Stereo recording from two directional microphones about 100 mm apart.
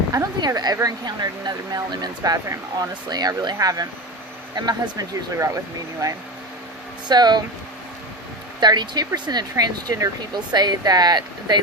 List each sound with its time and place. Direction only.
0.1 s speech: 40° right (ahead or behind)
7.1 s speech: 45° right (ahead or behind)
8.6 s speech: 45° right (ahead or behind)